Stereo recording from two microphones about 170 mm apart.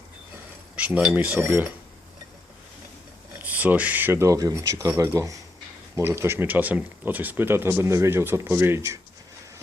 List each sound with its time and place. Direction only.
0.8 s speech: 5° right (ahead or behind)
3.4 s speech: 10° right (ahead or behind)